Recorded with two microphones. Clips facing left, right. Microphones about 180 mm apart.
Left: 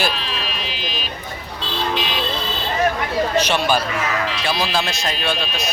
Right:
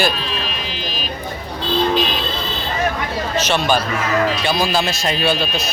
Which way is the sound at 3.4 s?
10° left (ahead or behind).